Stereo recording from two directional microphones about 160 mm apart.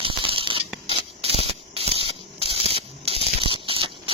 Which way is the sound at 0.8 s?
35° right (ahead or behind).